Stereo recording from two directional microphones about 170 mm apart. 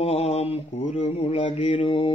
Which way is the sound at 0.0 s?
35° left (ahead or behind).